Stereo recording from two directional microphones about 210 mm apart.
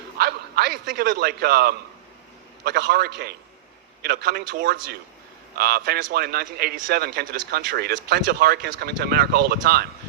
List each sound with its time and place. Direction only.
0.2 s a man's voice: 50° right (ahead or behind)